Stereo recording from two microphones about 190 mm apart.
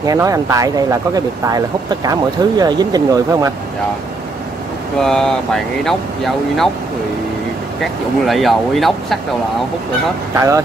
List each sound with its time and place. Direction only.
0.0 s speech: 15° right (ahead or behind)
5.0 s speech: 5° left (ahead or behind)
8.3 s speech: centre (ahead or behind)
10.3 s speech: 15° right (ahead or behind)